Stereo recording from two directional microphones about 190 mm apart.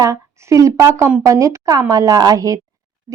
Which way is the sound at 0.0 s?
15° right (ahead or behind).